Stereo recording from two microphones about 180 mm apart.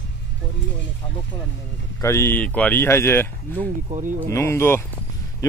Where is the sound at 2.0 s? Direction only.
15° left (ahead or behind).